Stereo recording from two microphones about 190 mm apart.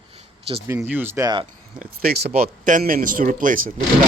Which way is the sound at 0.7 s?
10° right (ahead or behind).